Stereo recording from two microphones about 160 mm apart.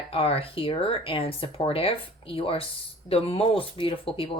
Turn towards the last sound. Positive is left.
turn(degrees=35)  # may be behind; listen again after turning